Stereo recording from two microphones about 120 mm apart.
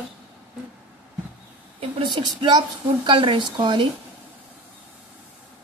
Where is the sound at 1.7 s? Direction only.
45° right (ahead or behind).